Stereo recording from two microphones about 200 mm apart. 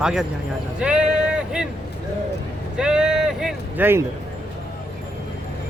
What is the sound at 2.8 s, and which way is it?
Speech, 5° right (ahead or behind).